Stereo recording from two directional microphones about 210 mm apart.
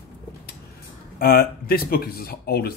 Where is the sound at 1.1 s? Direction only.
45° left (ahead or behind).